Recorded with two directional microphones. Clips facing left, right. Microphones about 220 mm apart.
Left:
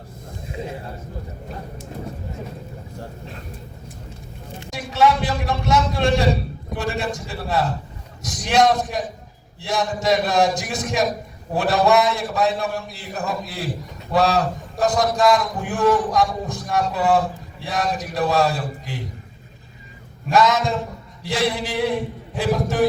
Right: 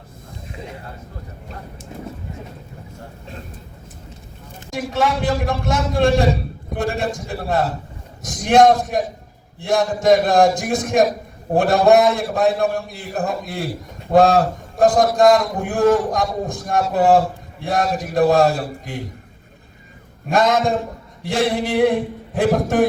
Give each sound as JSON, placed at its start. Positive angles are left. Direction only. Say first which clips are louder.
{"t": 4.7, "sound": "a man's voice", "louder": "left 1 dB", "side_deg": -50}
{"t": 20.3, "sound": "a man's voice", "louder": "right 1 dB", "side_deg": -50}
{"t": 21.2, "sound": "a sound", "louder": "right 3 dB", "side_deg": -55}
{"t": 22.4, "sound": "a man's voice", "louder": "right 3 dB", "side_deg": -55}